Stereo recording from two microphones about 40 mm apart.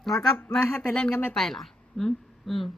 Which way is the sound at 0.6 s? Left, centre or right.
Left.